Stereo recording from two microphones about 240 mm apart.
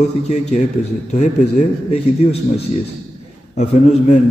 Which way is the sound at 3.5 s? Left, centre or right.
Left.